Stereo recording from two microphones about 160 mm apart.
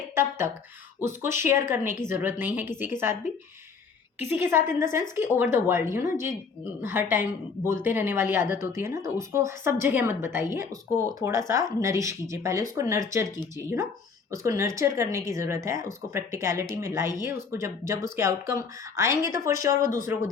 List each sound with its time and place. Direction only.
0.1 s speech: 15° right (ahead or behind)